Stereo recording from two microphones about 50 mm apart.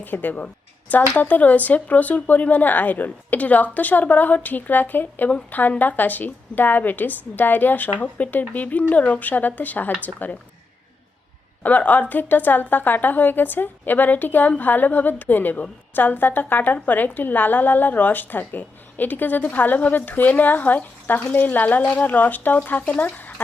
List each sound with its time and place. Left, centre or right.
0.0 s a woman's voice: left
11.6 s a woman's voice: left